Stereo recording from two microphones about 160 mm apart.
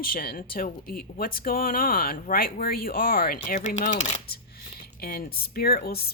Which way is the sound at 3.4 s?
55° left (ahead or behind).